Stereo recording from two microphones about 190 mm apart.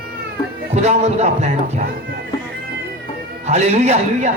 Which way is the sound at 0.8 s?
35° right (ahead or behind).